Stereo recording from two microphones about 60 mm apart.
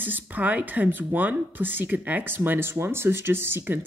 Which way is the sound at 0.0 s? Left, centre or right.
Right.